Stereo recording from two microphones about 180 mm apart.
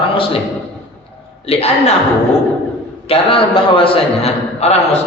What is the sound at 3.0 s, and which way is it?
A man's voice, 30° left (ahead or behind).